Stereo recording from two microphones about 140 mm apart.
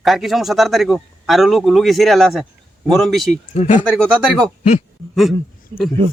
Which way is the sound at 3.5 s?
50° left (ahead or behind).